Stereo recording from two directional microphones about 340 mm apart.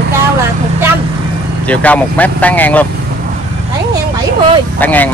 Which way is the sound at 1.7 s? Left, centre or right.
Centre.